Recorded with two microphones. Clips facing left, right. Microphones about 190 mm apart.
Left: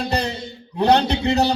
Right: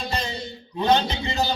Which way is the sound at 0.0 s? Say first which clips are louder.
Left 6 dB; 70° left (ahead or behind).